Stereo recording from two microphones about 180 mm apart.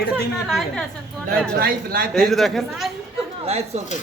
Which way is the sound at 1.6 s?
55° right (ahead or behind).